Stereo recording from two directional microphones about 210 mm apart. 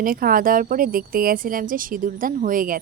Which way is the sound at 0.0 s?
45° right (ahead or behind).